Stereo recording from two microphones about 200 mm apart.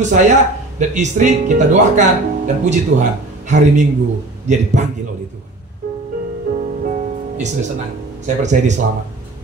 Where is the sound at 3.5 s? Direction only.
35° right (ahead or behind).